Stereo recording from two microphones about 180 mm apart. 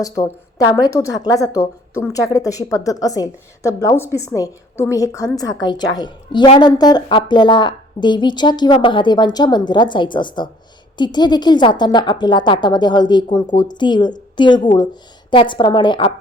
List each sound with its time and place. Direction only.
0.0 s a woman's voice: 20° left (ahead or behind)